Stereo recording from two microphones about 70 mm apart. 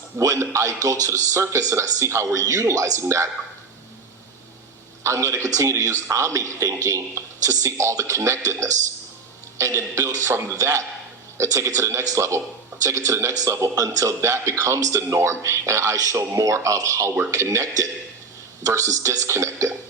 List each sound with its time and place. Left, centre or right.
0.2 s speech: right
5.0 s a man's voice: right